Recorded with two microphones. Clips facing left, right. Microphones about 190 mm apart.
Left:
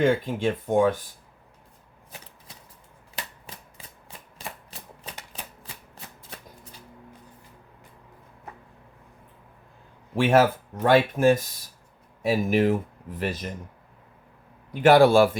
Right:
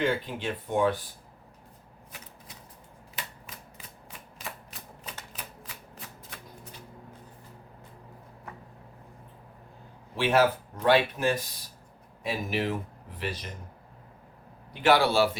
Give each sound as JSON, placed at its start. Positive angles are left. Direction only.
{"t": 0.0, "sound": "speech", "side_deg": 45}
{"t": 3.2, "sound": "shuffling cards", "side_deg": 30}
{"t": 10.2, "sound": "speech", "side_deg": 50}
{"t": 14.7, "sound": "speech", "side_deg": 45}